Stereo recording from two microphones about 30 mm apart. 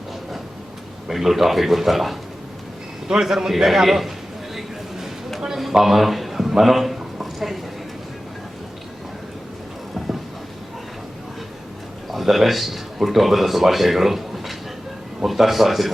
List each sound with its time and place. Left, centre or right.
1.0 s a man's voice: centre
3.1 s a man's voice: centre
5.8 s a man's voice: centre
12.1 s a man's voice: centre